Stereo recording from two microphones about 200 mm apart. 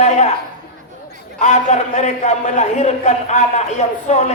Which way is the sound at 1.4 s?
35° left (ahead or behind).